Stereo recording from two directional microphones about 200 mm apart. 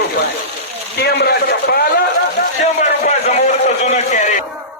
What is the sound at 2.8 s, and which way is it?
A man's voice, 35° left (ahead or behind).